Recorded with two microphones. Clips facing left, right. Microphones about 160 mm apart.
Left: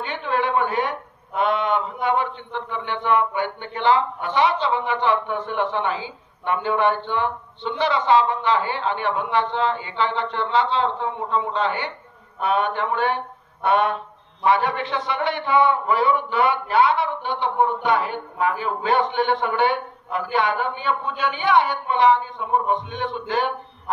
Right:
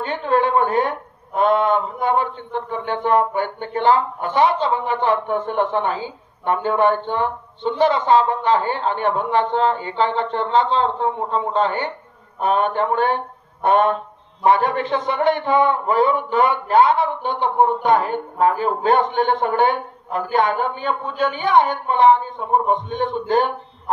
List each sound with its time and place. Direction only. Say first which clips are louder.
0.0 s speech: right 5 dB; 40° right (ahead or behind)